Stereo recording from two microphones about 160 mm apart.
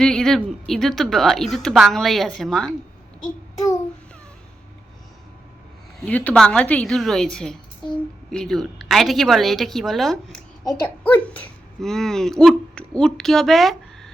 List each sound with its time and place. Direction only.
0.0 s a woman's voice: 5° left (ahead or behind)
3.5 s a child's voice: 20° left (ahead or behind)
6.0 s a woman's voice: 10° left (ahead or behind)